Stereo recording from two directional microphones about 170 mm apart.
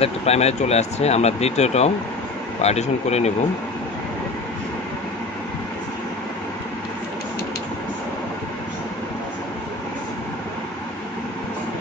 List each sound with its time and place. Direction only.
0.0 s speech: 40° left (ahead or behind)